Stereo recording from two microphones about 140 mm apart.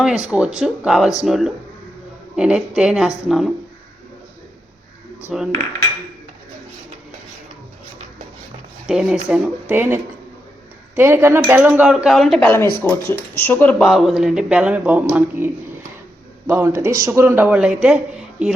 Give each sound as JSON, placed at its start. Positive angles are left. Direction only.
{"t": 0.0, "sound": "speech", "side_deg": -5}
{"t": 5.2, "sound": "speech", "side_deg": -5}
{"t": 8.9, "sound": "speech", "side_deg": -5}
{"t": 12.9, "sound": "speech", "side_deg": 15}
{"t": 16.5, "sound": "speech", "side_deg": -20}